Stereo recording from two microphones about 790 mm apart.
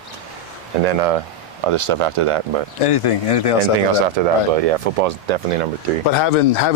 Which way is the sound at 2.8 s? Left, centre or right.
Left.